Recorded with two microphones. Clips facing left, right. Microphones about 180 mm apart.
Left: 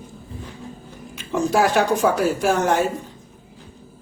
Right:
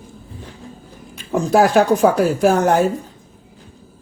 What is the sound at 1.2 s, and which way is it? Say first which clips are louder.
Speech: right 4 dB; 35° right (ahead or behind).